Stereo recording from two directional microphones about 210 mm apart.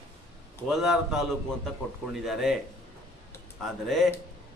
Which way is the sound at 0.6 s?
Centre (ahead or behind).